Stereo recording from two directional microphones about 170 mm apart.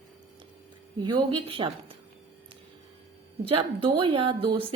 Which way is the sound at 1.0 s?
30° right (ahead or behind).